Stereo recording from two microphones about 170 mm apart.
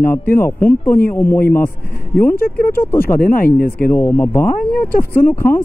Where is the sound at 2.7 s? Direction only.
15° left (ahead or behind).